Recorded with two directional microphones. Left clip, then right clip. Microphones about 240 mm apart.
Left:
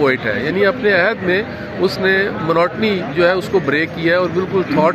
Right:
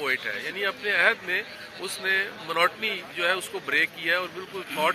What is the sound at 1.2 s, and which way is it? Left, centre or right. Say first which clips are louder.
Speech: left 11 dB; right.